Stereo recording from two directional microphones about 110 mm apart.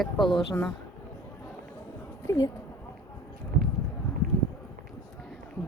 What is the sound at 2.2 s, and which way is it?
Speech, 25° left (ahead or behind).